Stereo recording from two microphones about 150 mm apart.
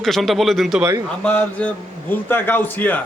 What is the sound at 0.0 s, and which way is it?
Speech, centre (ahead or behind).